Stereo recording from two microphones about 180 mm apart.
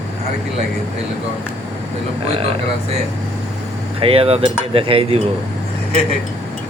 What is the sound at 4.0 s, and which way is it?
Cutlery, 30° right (ahead or behind).